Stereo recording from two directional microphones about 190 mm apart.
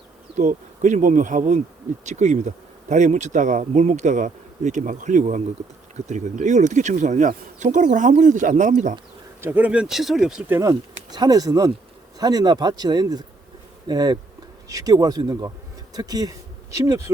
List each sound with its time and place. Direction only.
0.3 s speech: 40° right (ahead or behind)
9.4 s speech: 10° right (ahead or behind)